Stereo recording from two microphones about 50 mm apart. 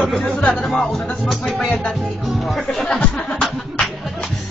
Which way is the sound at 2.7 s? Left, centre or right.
Centre.